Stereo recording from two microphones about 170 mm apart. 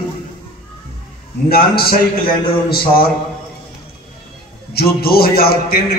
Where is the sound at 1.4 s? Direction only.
65° left (ahead or behind).